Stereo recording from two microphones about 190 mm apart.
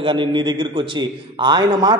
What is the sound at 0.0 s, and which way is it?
A man's voice, 25° right (ahead or behind).